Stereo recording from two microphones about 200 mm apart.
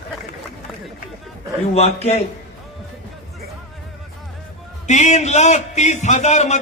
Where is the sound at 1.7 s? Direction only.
30° left (ahead or behind).